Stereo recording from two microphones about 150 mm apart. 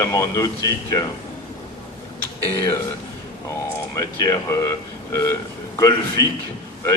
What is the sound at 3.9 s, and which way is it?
Speech, 20° left (ahead or behind).